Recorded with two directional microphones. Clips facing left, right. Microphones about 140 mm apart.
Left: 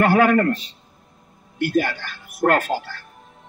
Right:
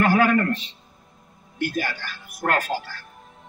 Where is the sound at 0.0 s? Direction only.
60° left (ahead or behind).